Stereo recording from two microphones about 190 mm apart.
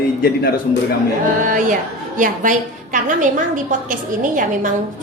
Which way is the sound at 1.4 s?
45° right (ahead or behind).